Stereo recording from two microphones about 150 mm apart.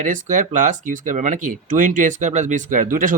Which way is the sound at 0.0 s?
60° right (ahead or behind).